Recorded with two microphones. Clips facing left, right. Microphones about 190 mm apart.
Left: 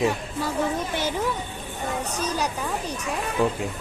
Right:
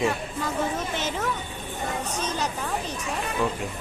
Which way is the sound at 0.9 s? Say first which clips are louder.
Left 3 dB; 10° left (ahead or behind).